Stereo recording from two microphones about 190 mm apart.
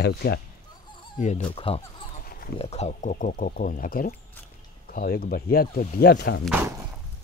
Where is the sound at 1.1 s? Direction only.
40° left (ahead or behind).